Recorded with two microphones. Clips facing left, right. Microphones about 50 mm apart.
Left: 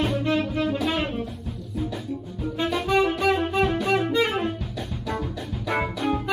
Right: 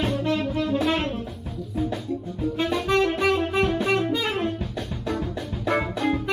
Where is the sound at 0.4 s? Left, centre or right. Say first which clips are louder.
Even; centre.